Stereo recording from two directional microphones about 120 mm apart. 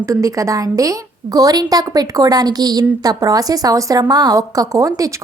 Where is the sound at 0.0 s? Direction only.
25° right (ahead or behind).